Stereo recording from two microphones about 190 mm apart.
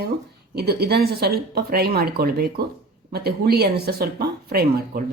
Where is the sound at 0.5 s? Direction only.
55° right (ahead or behind).